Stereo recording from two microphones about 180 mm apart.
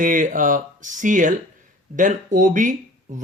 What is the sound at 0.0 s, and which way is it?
Speech, 45° right (ahead or behind).